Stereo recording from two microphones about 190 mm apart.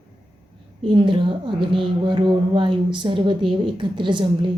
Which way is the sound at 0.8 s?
25° right (ahead or behind).